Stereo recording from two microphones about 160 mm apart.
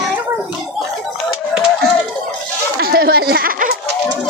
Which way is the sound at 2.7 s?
70° right (ahead or behind).